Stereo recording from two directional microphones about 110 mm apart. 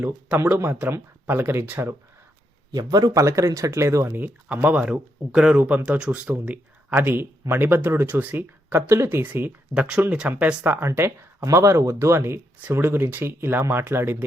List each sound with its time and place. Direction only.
0.4 s speech: 15° right (ahead or behind)
2.7 s speech: 35° right (ahead or behind); by 14.3 s 20° right (ahead or behind)